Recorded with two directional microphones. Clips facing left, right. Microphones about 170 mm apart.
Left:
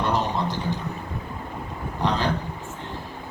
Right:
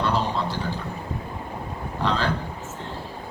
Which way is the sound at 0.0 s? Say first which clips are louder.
Even; 15° left (ahead or behind).